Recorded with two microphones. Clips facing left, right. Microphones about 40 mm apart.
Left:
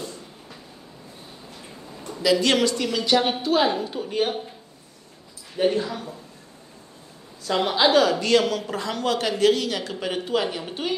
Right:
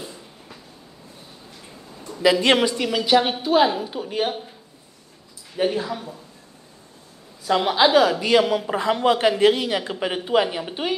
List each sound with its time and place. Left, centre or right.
0.0 s train: centre
2.2 s a woman's voice: right; by 4.4 s centre
5.6 s a woman's voice: centre
7.4 s a woman's voice: centre